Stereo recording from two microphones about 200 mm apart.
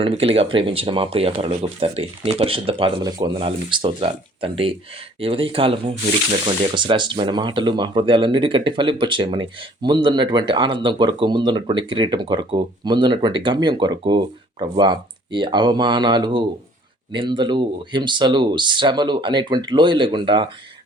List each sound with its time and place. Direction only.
0.0 s speech: 30° right (ahead or behind)